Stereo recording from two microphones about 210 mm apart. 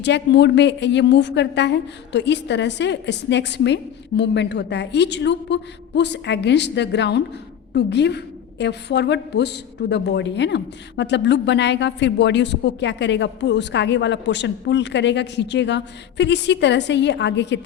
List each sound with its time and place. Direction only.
0.0 s a woman's voice: 55° left (ahead or behind)